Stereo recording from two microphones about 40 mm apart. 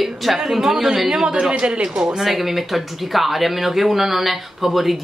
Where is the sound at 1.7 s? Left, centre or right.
Right.